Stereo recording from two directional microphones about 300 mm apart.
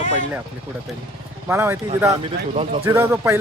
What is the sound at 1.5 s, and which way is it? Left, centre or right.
Speech, centre.